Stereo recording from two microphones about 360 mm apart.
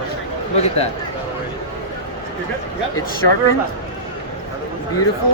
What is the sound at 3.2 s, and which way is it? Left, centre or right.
Speech, left.